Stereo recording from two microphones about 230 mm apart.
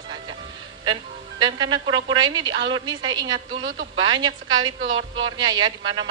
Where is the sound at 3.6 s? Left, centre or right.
Right.